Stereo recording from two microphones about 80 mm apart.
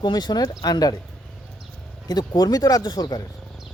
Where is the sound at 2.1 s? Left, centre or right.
Left.